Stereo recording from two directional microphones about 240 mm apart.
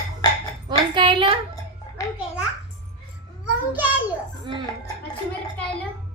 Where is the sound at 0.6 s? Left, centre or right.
Centre.